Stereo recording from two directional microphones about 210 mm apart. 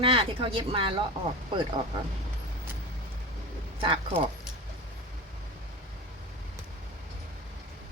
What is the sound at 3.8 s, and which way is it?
Speech, 25° right (ahead or behind).